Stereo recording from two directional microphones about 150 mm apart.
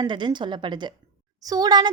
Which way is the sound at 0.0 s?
30° right (ahead or behind).